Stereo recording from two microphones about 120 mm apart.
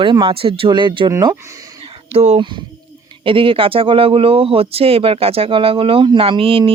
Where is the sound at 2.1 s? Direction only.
70° right (ahead or behind).